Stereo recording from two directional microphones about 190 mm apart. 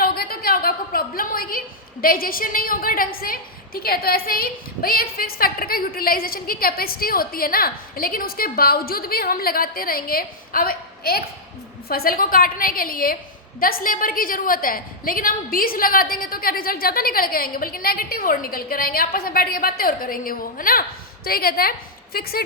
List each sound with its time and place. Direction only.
0.0 s a woman's voice: 55° left (ahead or behind)